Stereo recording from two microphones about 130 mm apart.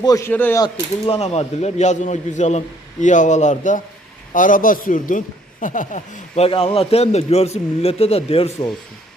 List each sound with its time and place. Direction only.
0.0 s speech: 25° left (ahead or behind)
0.3 s speech: 15° left (ahead or behind)
0.6 s a man's voice: 45° left (ahead or behind); by 3.8 s 75° left (ahead or behind)
4.4 s a man's voice: 90° left; by 8.7 s 50° left (ahead or behind)